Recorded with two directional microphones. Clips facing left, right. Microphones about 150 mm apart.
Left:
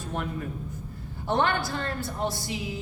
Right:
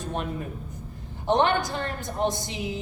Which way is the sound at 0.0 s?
20° right (ahead or behind).